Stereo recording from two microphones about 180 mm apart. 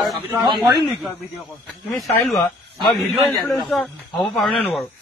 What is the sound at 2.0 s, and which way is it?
A man's voice, centre (ahead or behind).